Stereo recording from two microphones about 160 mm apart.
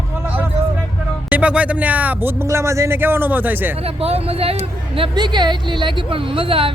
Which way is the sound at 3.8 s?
35° right (ahead or behind).